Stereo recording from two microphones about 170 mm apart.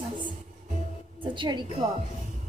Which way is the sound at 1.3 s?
25° right (ahead or behind).